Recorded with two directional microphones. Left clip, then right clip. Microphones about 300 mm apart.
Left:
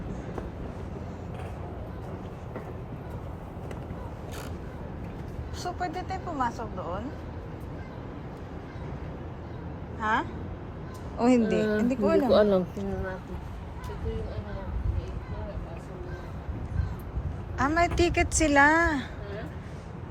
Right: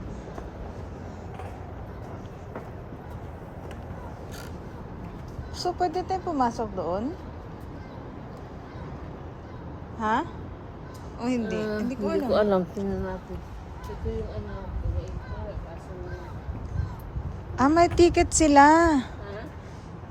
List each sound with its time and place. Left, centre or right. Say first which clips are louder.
5.5 s a woman's voice: right 6 dB; centre
10.0 s speech: right 1 dB; centre
11.2 s speech: left 5 dB; centre
17.6 s a woman's voice: right 5 dB; centre